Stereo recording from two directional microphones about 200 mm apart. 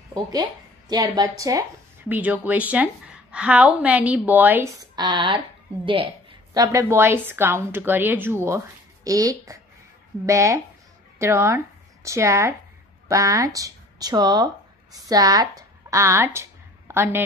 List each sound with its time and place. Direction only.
0.1 s speech: 20° right (ahead or behind)
6.5 s a woman's voice: 15° right (ahead or behind)